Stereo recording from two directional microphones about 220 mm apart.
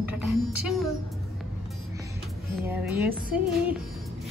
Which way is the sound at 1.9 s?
15° right (ahead or behind).